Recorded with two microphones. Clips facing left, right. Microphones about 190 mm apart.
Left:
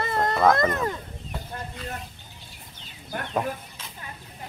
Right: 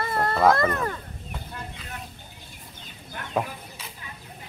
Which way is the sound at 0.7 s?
15° left (ahead or behind).